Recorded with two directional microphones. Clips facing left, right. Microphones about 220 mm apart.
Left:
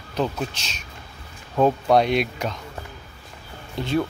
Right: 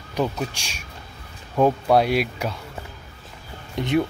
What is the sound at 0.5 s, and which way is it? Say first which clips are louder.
Speech: even; 10° right (ahead or behind).